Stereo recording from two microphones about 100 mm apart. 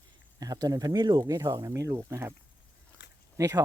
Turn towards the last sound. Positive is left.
turn(degrees=-30)  # may be behind; listen again after turning